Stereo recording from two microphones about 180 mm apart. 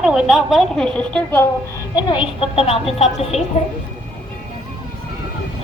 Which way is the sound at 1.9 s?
25° left (ahead or behind).